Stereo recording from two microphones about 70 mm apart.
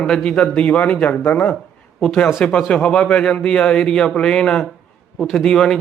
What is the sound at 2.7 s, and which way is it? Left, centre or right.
Speech, centre.